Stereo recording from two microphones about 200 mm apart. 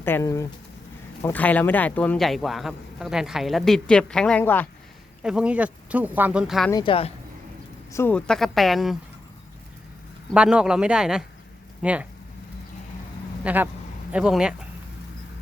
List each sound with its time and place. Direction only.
0.0 s speech: 15° left (ahead or behind)
5.2 s speech: 5° right (ahead or behind)
6.7 s speech: 20° left (ahead or behind)
7.9 s speech: 10° left (ahead or behind)
10.3 s speech: 5° right (ahead or behind)
13.4 s speech: 10° right (ahead or behind)